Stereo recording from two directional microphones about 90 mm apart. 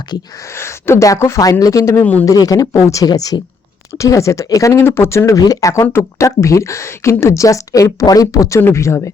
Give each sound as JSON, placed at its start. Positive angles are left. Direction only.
{"t": 0.5, "sound": "speech", "side_deg": 30}
{"t": 3.1, "sound": "speech", "side_deg": 50}
{"t": 3.9, "sound": "speech", "side_deg": 35}
{"t": 4.8, "sound": "speech", "side_deg": 25}